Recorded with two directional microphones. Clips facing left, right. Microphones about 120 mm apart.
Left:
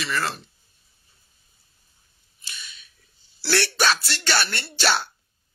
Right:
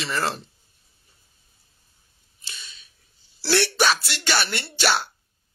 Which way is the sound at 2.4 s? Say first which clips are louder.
Left 1 dB; 30° right (ahead or behind).